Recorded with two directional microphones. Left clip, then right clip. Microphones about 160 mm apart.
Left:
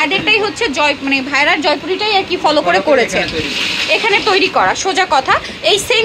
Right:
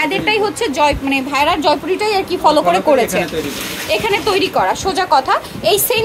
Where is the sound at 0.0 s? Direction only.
15° right (ahead or behind).